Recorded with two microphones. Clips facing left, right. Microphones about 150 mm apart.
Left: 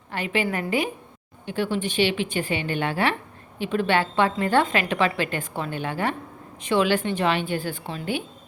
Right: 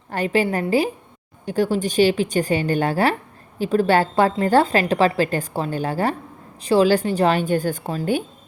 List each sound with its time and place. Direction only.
0.1 s a woman's voice: 40° right (ahead or behind)